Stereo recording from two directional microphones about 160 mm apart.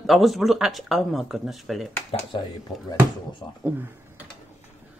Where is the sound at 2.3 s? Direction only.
30° left (ahead or behind).